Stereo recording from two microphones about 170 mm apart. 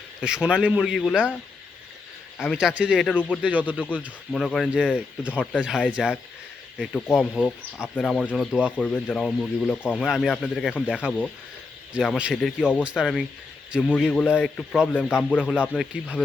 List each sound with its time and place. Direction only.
0.3 s a man's voice: 5° right (ahead or behind)
2.4 s a man's voice: 5° right (ahead or behind)
3.1 s speech: 10° left (ahead or behind)
3.4 s speech: 10° right (ahead or behind)
3.8 s a man's voice: 10° left (ahead or behind)
5.4 s speech: 10° left (ahead or behind)
5.6 s a man's voice: 5° right (ahead or behind)
6.9 s a man's voice: centre (ahead or behind)
8.8 s a man's voice: 5° left (ahead or behind)
14.3 s a man's voice: 10° left (ahead or behind)